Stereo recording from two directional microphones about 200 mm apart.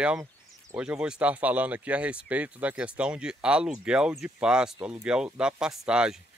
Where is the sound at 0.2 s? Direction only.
10° right (ahead or behind).